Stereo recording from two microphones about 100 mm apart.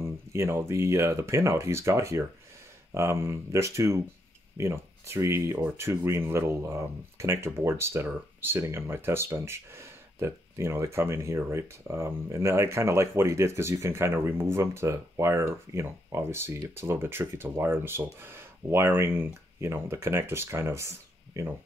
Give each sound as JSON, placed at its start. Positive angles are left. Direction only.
{"t": 0.0, "sound": "speech", "side_deg": -30}